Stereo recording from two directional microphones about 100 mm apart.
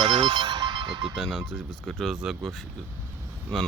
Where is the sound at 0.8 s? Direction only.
65° right (ahead or behind).